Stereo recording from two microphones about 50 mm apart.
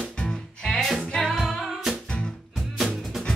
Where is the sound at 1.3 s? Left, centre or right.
Centre.